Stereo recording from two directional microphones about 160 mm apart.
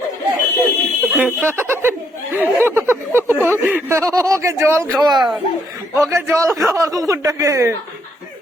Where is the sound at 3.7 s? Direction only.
15° right (ahead or behind).